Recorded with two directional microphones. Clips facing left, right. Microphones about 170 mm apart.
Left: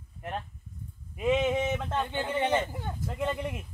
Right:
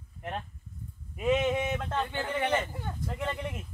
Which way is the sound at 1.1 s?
Centre (ahead or behind).